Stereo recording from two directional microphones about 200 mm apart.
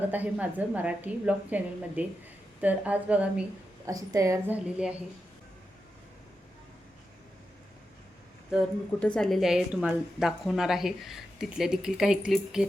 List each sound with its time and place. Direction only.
0.1 s a woman's voice: 10° right (ahead or behind)
3.8 s a woman's voice: 15° right (ahead or behind)
9.0 s a woman's voice: 5° left (ahead or behind)